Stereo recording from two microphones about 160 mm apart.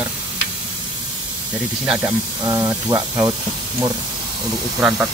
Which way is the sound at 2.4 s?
20° right (ahead or behind).